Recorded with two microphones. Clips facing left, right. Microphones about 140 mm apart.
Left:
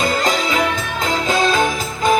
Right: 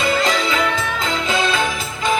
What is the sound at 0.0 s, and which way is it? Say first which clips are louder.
Music: even; 40° left (ahead or behind).